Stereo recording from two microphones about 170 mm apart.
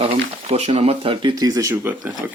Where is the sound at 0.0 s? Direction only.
35° right (ahead or behind).